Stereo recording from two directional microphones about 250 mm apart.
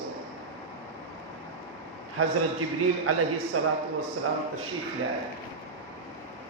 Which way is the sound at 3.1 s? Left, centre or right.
Right.